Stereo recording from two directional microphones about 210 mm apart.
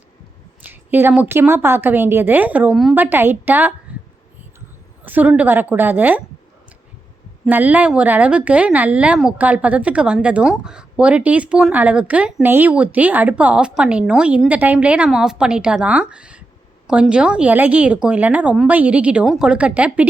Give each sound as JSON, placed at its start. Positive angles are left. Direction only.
{"t": 0.6, "sound": "a woman's voice", "side_deg": -10}
{"t": 3.9, "sound": "a sound", "side_deg": -5}
{"t": 5.0, "sound": "a woman's voice", "side_deg": -10}
{"t": 7.4, "sound": "a woman's voice", "side_deg": -10}